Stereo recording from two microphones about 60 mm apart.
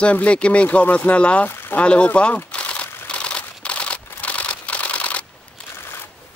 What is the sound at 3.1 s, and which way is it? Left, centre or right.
Camera, centre.